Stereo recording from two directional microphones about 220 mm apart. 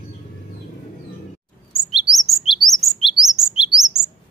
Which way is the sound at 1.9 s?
Centre (ahead or behind).